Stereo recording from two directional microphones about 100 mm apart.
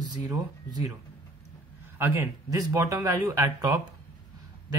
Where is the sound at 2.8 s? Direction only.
35° right (ahead or behind).